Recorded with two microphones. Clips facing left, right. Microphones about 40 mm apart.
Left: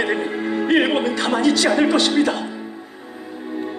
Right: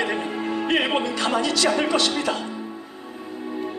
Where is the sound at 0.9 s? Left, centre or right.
Left.